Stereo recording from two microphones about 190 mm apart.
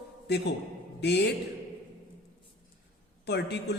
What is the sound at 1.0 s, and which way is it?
Music, 60° left (ahead or behind).